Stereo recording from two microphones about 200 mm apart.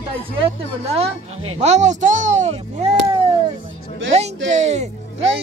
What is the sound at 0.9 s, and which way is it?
Speech, 30° right (ahead or behind).